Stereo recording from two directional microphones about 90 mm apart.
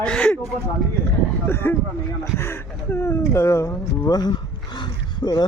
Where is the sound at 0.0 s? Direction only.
10° left (ahead or behind).